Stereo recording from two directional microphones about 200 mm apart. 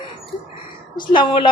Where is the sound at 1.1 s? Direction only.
25° left (ahead or behind).